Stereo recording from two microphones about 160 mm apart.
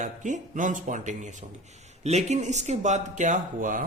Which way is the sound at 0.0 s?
50° right (ahead or behind).